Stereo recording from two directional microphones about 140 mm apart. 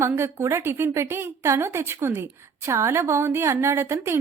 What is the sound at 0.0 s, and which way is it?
A woman's voice, 20° right (ahead or behind).